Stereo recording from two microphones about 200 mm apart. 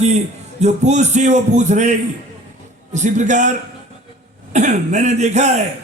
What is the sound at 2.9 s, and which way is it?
Speech, 35° right (ahead or behind).